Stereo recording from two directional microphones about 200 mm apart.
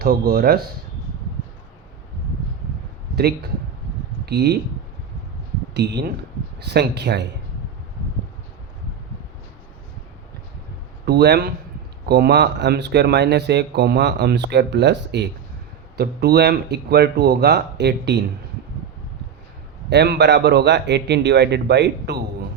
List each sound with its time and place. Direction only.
0.0 s speech: 50° right (ahead or behind)
3.2 s speech: 55° right (ahead or behind)
5.7 s speech: 55° right (ahead or behind)
11.0 s speech: 55° right (ahead or behind)
19.9 s speech: 55° right (ahead or behind)